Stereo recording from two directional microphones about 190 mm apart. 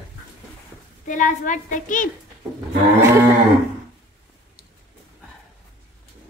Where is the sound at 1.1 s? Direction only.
45° left (ahead or behind).